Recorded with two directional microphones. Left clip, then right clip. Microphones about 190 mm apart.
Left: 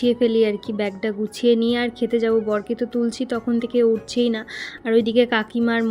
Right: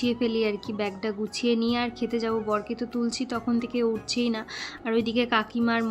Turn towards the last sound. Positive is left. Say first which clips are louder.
# left 4 dB
turn(degrees=20)  # may be behind; listen again after turning